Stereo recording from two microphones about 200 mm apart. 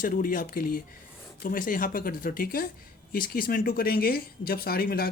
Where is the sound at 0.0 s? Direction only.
45° left (ahead or behind).